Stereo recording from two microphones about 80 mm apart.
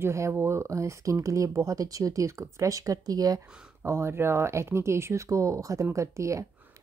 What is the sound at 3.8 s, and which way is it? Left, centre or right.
Speech, right.